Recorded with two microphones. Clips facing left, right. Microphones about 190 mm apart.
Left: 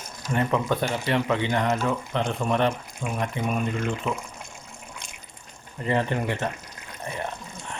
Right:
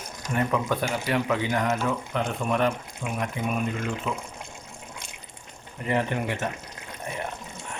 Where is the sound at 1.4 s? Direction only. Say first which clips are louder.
Left 1 dB; 5° right (ahead or behind).